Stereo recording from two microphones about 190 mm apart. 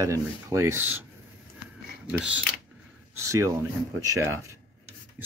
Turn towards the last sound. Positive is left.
turn(degrees=-15)  # may be behind; listen again after turning